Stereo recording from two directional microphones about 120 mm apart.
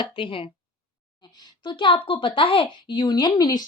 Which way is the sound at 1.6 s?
40° left (ahead or behind).